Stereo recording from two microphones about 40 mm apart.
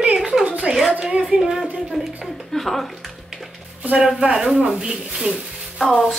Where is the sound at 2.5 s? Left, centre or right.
Centre.